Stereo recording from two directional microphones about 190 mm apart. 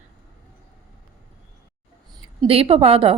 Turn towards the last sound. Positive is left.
turn(degrees=-30)  # may be behind; listen again after turning